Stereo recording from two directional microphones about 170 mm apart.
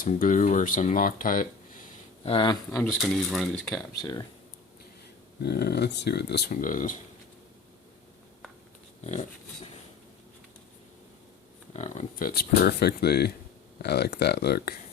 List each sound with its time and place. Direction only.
0.0 s speech: 50° left (ahead or behind)
2.2 s speech: 30° left (ahead or behind)
2.8 s speech: centre (ahead or behind)
3.9 s speech: 25° left (ahead or behind)
5.4 s speech: 70° left (ahead or behind)
6.5 s speech: 50° left (ahead or behind)
11.7 s speech: 40° left (ahead or behind)
12.1 s speech: 60° left (ahead or behind)